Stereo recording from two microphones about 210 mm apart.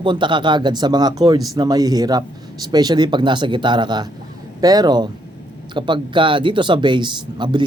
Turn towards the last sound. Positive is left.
turn(degrees=-20)  # may be behind; listen again after turning